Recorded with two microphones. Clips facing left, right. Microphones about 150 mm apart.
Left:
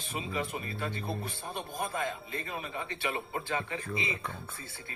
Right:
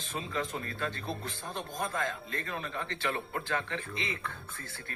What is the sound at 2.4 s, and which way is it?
Speech, 15° left (ahead or behind).